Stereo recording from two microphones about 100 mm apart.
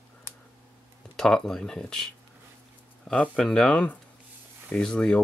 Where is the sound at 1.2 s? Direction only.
5° left (ahead or behind).